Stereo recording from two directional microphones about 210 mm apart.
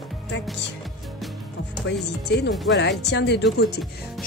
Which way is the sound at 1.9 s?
55° left (ahead or behind).